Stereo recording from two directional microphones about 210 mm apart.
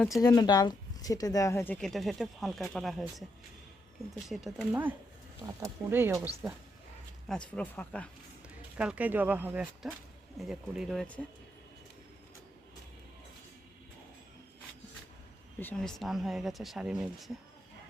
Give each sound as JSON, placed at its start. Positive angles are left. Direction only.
{"t": 0.2, "sound": "speech", "side_deg": 15}
{"t": 4.3, "sound": "speech", "side_deg": 0}
{"t": 7.3, "sound": "speech", "side_deg": 5}
{"t": 8.8, "sound": "speech", "side_deg": -5}
{"t": 15.6, "sound": "speech", "side_deg": 5}